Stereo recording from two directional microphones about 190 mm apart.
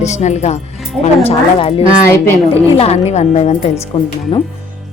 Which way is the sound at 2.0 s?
15° left (ahead or behind).